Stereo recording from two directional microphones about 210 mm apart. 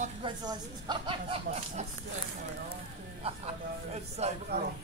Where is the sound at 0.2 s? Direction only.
20° right (ahead or behind).